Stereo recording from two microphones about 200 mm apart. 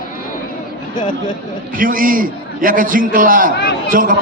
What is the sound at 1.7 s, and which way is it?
A man's voice, 45° right (ahead or behind).